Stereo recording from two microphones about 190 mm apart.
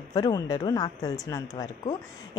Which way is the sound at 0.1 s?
20° left (ahead or behind).